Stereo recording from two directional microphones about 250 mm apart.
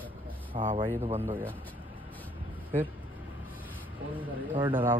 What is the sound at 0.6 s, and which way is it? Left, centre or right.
Speech, right.